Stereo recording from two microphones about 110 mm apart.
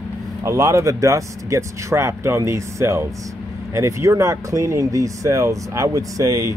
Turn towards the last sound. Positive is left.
turn(degrees=-30)  # may be behind; listen again after turning